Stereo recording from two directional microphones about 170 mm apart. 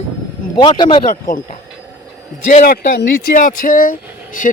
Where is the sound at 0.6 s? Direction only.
30° left (ahead or behind).